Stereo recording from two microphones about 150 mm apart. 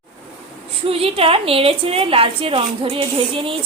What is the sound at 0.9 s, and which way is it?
A woman's voice, 40° right (ahead or behind).